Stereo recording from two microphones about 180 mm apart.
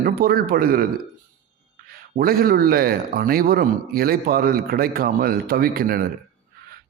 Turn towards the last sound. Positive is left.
turn(degrees=-55)  # may be behind; listen again after turning